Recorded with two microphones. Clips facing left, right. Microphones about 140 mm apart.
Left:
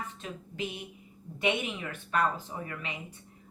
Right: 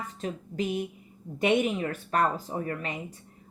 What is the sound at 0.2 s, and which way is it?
Speech, 40° right (ahead or behind).